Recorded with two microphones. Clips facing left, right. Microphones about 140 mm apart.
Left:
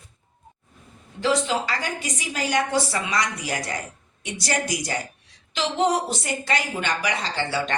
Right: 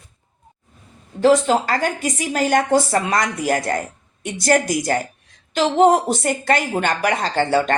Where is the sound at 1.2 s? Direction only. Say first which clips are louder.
Right 8 dB; 45° right (ahead or behind).